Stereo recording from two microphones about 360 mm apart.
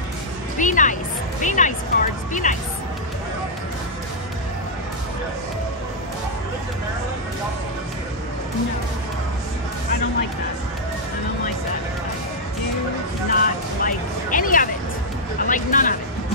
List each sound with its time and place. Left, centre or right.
0.6 s speech: left
13.3 s vehicle: left
15.4 s speech: left